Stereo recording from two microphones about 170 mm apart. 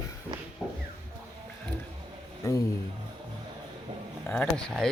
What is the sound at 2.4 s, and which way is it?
Speech, 20° left (ahead or behind).